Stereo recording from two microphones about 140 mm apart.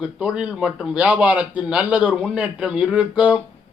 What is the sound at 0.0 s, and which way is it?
A man's voice, 5° right (ahead or behind).